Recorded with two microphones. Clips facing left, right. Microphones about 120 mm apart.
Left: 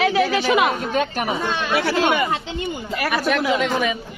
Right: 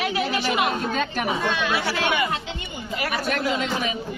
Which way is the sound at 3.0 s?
70° left (ahead or behind).